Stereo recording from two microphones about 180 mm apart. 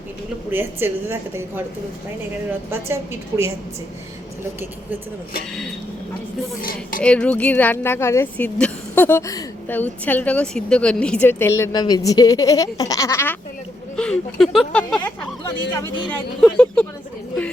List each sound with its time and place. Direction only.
0.5 s a woman's voice: 10° right (ahead or behind)
2.6 s a woman's voice: 15° right (ahead or behind)
6.6 s a woman's voice: 55° left (ahead or behind)
7.0 s speech: 5° left (ahead or behind)
13.9 s speech: 5° left (ahead or behind)